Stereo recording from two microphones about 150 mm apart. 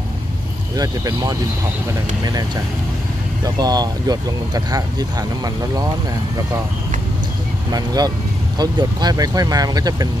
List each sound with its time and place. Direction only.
0.7 s speech: 25° right (ahead or behind)
7.7 s speech: 25° right (ahead or behind)